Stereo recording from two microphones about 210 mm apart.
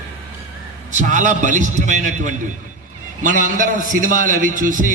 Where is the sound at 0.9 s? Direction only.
35° right (ahead or behind).